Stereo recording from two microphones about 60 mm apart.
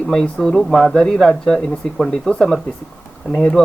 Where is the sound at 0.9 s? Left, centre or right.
Centre.